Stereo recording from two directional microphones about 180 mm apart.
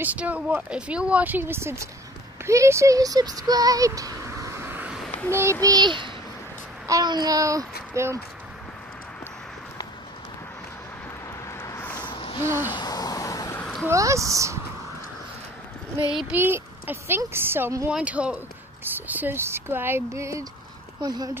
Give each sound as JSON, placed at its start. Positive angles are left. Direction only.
{"t": 0.0, "sound": "a woman's voice", "side_deg": -10}
{"t": 5.3, "sound": "child singing", "side_deg": -15}
{"t": 7.9, "sound": "speech", "side_deg": -15}
{"t": 11.6, "sound": "vehicle", "side_deg": 15}
{"t": 12.1, "sound": "a sound", "side_deg": 30}
{"t": 12.7, "sound": "vehicle", "side_deg": 20}
{"t": 13.8, "sound": "a woman's voice", "side_deg": -15}
{"t": 16.0, "sound": "a woman's voice", "side_deg": -5}
{"t": 21.0, "sound": "child singing", "side_deg": -20}